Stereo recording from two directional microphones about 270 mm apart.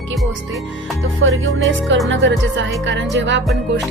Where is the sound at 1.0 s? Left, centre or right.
Right.